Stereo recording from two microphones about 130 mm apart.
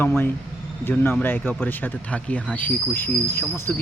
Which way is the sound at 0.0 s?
15° left (ahead or behind).